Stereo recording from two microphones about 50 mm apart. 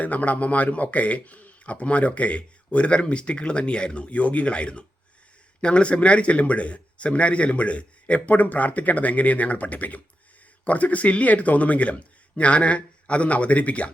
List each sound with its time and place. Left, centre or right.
0.0 s speech: left